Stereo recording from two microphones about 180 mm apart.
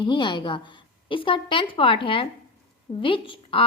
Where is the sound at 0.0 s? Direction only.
25° left (ahead or behind).